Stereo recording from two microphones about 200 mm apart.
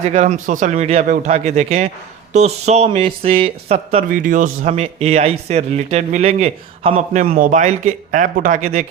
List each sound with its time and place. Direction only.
0.0 s speech: 40° right (ahead or behind)